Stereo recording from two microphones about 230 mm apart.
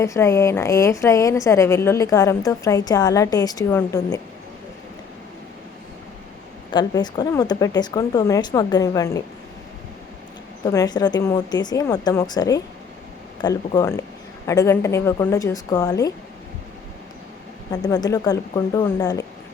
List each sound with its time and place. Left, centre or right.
0.0 s a woman's voice: centre
6.7 s a woman's voice: centre
10.7 s a woman's voice: centre
17.7 s a woman's voice: centre